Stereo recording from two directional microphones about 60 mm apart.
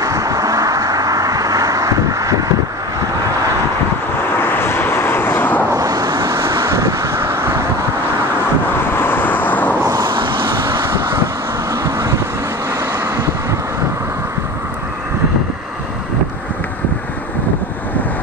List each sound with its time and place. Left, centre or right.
0.0 s vehicle: right
4.4 s vehicle: left
5.7 s vehicle: right
8.9 s vehicle: left
9.8 s vehicle: right
10.6 s vehicle: right
11.7 s vehicle: right
13.0 s vehicle: right